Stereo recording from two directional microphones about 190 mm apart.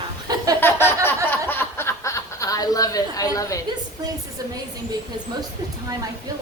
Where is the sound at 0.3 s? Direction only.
20° right (ahead or behind).